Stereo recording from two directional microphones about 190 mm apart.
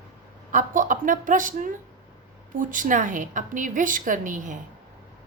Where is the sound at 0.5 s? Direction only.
45° right (ahead or behind).